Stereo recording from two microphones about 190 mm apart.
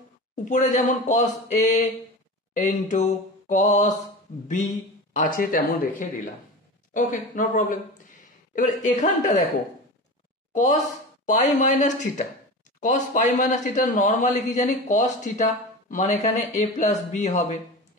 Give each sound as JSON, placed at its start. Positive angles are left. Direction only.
{"t": 0.5, "sound": "speech", "side_deg": 40}
{"t": 5.1, "sound": "speech", "side_deg": 45}
{"t": 10.5, "sound": "speech", "side_deg": 40}